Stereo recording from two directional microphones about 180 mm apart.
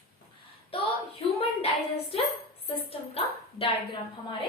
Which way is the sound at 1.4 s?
35° left (ahead or behind).